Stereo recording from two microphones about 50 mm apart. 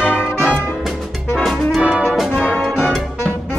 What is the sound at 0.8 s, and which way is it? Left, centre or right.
Music, centre.